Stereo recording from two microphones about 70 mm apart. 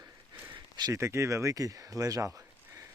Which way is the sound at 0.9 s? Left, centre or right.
Right.